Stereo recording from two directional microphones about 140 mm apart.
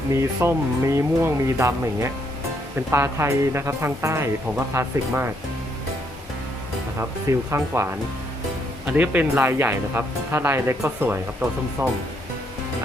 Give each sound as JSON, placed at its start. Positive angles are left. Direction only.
{"t": 0.4, "sound": "speech", "side_deg": -20}
{"t": 7.0, "sound": "speech", "side_deg": -20}